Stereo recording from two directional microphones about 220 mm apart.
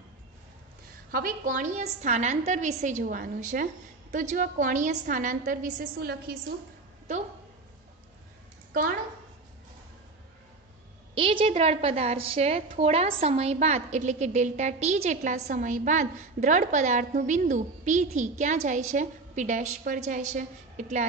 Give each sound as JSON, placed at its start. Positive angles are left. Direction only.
{"t": 1.1, "sound": "a woman's voice", "side_deg": -40}
{"t": 11.1, "sound": "a woman's voice", "side_deg": -25}